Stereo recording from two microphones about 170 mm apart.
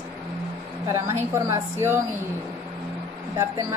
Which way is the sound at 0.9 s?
15° right (ahead or behind).